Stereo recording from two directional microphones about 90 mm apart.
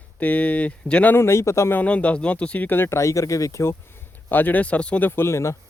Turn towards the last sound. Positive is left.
turn(degrees=30)  # may be behind; listen again after turning